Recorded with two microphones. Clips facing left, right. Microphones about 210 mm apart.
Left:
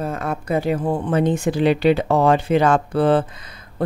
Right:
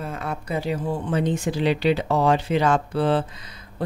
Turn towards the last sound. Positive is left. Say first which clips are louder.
# left 5 dB
turn(degrees=55)  # may be behind; listen again after turning